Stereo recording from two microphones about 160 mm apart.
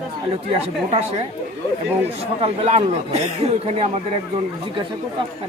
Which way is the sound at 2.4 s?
40° right (ahead or behind).